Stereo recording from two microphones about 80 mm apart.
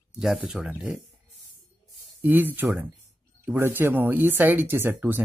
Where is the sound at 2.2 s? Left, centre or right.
Right.